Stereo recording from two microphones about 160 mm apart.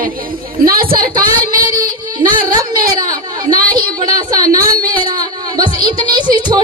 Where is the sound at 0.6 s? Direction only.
65° right (ahead or behind).